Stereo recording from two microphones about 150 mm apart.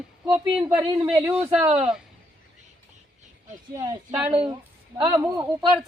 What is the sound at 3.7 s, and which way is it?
A man's voice, 25° right (ahead or behind).